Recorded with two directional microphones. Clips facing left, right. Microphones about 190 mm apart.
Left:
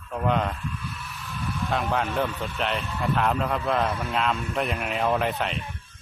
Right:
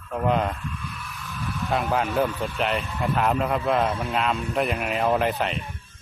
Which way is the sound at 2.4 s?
5° right (ahead or behind).